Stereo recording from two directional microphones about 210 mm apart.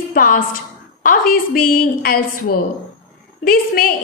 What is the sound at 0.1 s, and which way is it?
A woman's voice, 45° left (ahead or behind).